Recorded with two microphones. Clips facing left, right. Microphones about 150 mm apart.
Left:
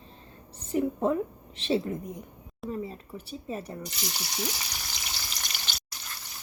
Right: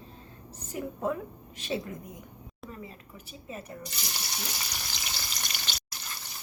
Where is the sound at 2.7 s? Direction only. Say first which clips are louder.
Left 10 dB; 30° left (ahead or behind).